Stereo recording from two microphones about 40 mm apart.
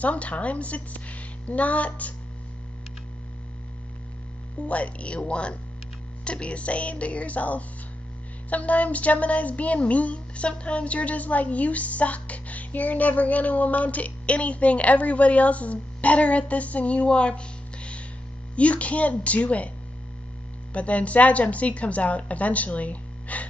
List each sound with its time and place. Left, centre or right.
0.0 s speech: left
4.6 s speech: left
20.7 s speech: left